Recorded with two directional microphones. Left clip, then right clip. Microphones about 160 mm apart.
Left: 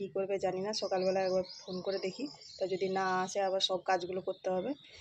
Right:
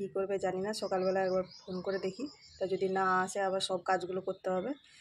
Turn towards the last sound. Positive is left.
turn(degrees=-20)  # may be behind; listen again after turning